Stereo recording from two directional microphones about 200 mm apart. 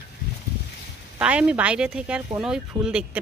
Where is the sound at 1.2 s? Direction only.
5° right (ahead or behind).